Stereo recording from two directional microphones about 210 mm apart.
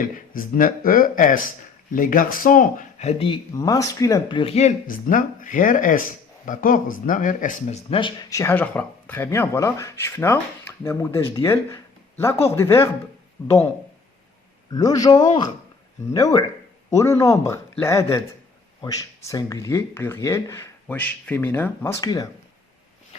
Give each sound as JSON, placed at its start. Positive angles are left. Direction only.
{"t": 0.0, "sound": "speech", "side_deg": 40}
{"t": 3.5, "sound": "speech", "side_deg": 15}
{"t": 14.7, "sound": "speech", "side_deg": 15}